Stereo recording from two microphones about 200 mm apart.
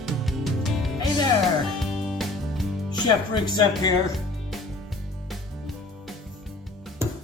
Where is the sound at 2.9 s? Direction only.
20° left (ahead or behind).